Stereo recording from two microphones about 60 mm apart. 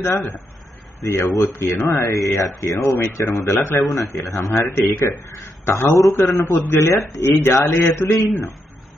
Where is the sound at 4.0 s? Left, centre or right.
Left.